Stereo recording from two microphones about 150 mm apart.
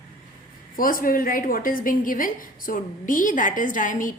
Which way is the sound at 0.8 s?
70° left (ahead or behind).